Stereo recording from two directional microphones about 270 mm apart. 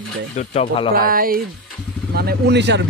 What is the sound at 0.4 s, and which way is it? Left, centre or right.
Speech, left.